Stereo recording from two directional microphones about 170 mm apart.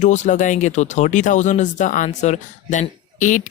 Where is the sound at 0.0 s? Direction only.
45° left (ahead or behind).